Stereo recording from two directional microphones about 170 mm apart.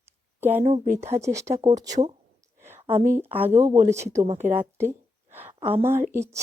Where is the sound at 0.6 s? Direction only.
40° right (ahead or behind).